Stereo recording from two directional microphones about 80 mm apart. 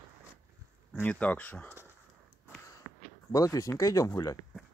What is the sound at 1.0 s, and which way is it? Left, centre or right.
Speech, centre.